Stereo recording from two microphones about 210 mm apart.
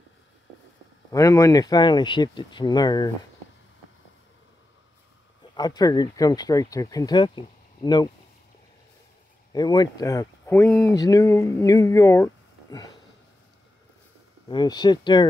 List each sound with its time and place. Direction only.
1.1 s speech: 15° left (ahead or behind)
5.6 s speech: 20° left (ahead or behind)
9.5 s speech: 20° left (ahead or behind)
14.5 s speech: 20° left (ahead or behind)